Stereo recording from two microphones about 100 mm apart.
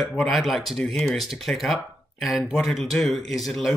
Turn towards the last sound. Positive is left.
turn(degrees=0)  # may be behind; listen again after turning